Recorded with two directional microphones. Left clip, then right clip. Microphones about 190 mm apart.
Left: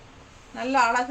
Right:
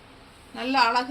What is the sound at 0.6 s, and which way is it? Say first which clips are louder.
Speech: even; 20° left (ahead or behind).